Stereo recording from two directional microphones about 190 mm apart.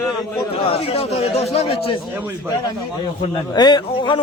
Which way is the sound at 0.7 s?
30° left (ahead or behind).